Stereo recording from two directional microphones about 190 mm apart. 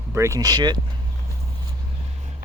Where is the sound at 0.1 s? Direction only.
15° right (ahead or behind).